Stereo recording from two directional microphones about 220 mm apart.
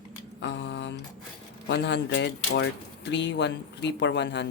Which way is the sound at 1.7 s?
50° left (ahead or behind).